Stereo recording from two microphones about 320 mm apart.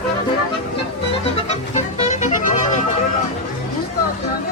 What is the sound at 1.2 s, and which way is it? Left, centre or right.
Music, centre.